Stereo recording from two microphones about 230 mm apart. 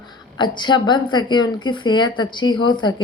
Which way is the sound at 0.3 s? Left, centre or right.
Centre.